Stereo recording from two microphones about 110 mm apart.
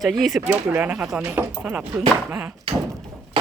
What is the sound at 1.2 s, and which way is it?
Speech, 20° right (ahead or behind).